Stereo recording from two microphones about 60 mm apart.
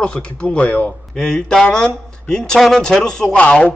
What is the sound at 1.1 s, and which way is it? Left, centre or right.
Speech, centre.